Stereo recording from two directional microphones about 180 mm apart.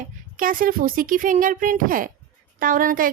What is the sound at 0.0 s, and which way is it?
A woman's voice, 50° right (ahead or behind).